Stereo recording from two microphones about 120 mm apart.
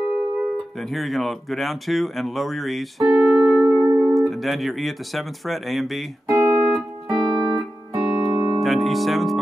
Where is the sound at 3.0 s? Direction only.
25° right (ahead or behind).